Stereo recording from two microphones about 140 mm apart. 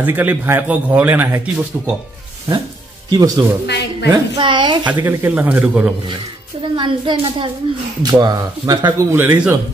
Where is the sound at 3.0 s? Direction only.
30° right (ahead or behind).